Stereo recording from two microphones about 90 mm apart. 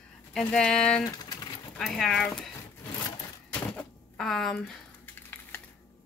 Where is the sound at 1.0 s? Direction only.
45° left (ahead or behind).